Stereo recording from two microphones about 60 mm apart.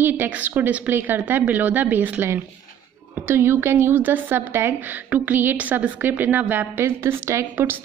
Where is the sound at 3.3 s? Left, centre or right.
Right.